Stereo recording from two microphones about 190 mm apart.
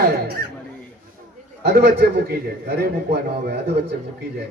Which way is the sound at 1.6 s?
60° right (ahead or behind).